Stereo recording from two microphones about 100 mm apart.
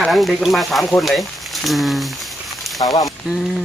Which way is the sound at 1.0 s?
Centre (ahead or behind).